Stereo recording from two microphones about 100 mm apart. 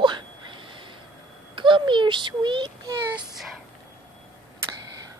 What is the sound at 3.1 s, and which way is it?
Speech, centre (ahead or behind).